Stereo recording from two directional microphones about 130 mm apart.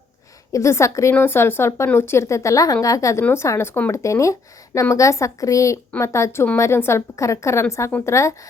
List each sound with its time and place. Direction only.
0.5 s speech: 20° left (ahead or behind)